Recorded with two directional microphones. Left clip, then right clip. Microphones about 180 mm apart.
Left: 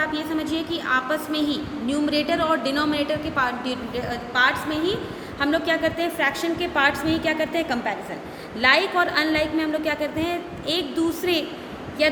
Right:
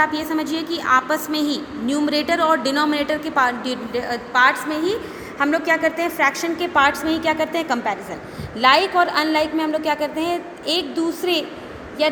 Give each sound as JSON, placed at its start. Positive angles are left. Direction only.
{"t": 0.0, "sound": "a woman's voice", "side_deg": -40}
{"t": 5.4, "sound": "a woman's voice", "side_deg": -25}